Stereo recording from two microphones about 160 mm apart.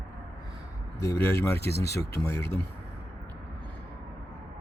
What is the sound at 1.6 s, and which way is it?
Speech, 90° left.